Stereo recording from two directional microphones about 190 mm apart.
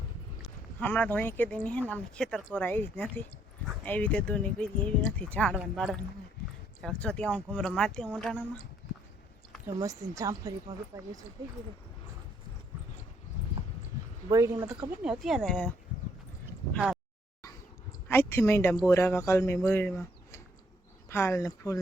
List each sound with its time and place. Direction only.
0.8 s speech: 10° left (ahead or behind)
9.6 s speech: 15° right (ahead or behind)
14.3 s speech: 15° right (ahead or behind); by 15.7 s 5° left (ahead or behind)
18.1 s speech: 10° left (ahead or behind)
21.1 s speech: 15° left (ahead or behind)